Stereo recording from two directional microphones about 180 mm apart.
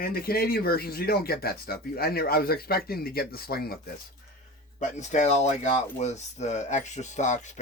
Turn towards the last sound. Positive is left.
turn(degrees=40)  # may be behind; listen again after turning